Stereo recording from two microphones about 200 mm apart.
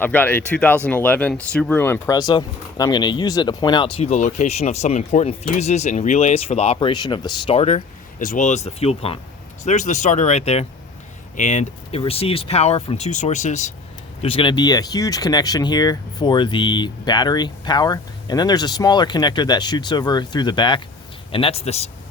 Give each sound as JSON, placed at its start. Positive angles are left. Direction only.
{"t": 0.0, "sound": "speech", "side_deg": 10}